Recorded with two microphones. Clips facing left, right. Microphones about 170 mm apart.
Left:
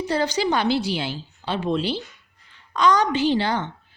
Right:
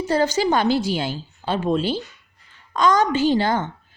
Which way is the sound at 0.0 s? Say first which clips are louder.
Right 3 dB; 45° right (ahead or behind).